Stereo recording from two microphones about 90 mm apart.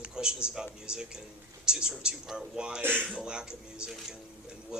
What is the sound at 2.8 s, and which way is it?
Speech, 25° right (ahead or behind).